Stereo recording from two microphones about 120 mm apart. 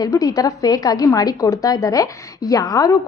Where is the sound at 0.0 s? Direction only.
30° left (ahead or behind).